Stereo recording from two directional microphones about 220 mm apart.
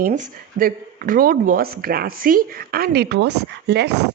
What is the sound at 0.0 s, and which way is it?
Speech, 35° right (ahead or behind).